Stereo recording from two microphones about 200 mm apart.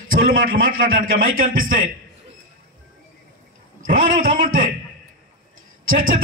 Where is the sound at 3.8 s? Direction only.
45° right (ahead or behind).